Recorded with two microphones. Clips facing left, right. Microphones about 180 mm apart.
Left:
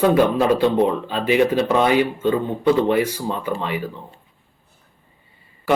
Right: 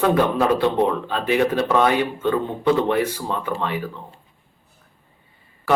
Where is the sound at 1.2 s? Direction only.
15° left (ahead or behind).